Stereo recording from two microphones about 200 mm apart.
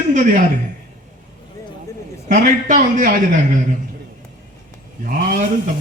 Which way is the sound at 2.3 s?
40° right (ahead or behind).